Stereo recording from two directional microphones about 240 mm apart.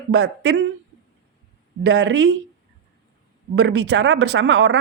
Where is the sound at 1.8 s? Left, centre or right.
Right.